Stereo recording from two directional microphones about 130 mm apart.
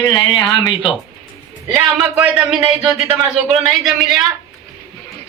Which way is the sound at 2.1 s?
10° right (ahead or behind).